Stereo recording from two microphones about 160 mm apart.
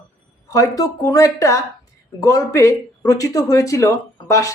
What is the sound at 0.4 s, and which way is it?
Speech, 20° left (ahead or behind).